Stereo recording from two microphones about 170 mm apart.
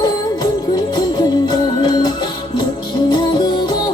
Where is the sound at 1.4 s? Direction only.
25° left (ahead or behind).